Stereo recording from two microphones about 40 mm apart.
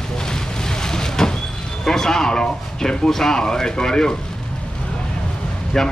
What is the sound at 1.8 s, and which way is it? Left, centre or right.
Speech, centre.